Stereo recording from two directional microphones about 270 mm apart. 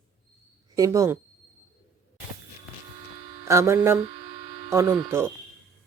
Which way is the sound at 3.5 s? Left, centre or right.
Centre.